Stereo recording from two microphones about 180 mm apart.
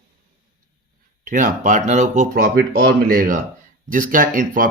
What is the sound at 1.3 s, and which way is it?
Speech, 45° right (ahead or behind).